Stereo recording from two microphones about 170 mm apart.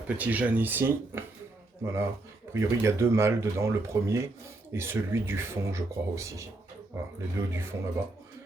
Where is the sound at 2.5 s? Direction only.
15° right (ahead or behind).